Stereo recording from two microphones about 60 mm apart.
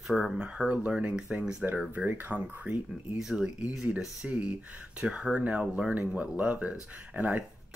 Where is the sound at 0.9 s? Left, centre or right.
Right.